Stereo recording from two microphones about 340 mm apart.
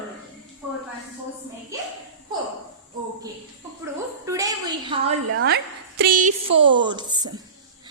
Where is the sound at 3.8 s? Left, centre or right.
Centre.